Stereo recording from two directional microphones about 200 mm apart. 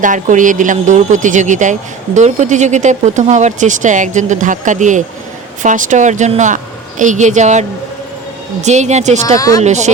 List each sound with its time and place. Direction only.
0.0 s speech: 40° right (ahead or behind)
8.6 s speech: 35° right (ahead or behind)